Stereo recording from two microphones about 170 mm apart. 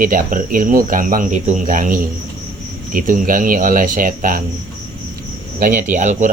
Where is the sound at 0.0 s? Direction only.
55° right (ahead or behind).